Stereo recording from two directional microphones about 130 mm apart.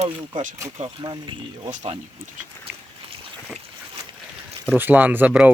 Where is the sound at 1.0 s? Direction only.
35° right (ahead or behind).